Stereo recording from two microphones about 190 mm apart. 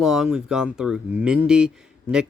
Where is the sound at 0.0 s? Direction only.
Centre (ahead or behind).